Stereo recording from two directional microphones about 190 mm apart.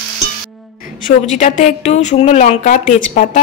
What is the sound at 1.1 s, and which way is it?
A woman's voice, 40° left (ahead or behind).